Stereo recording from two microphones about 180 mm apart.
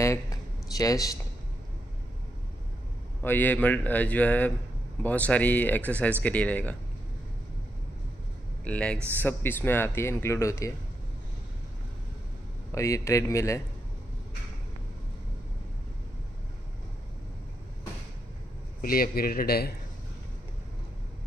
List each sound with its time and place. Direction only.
0.0 s a sound: 15° left (ahead or behind)
3.2 s speech: 10° left (ahead or behind)
8.6 s speech: 5° left (ahead or behind)
12.7 s speech: 15° left (ahead or behind)
18.8 s a man's voice: 55° left (ahead or behind)